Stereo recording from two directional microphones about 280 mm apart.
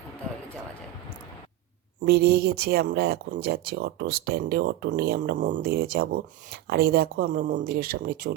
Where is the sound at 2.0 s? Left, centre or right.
Right.